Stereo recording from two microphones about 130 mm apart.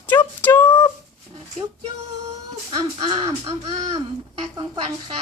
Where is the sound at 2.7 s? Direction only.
35° right (ahead or behind).